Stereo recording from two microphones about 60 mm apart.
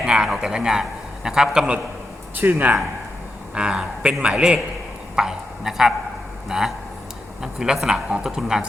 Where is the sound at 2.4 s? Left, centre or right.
Right.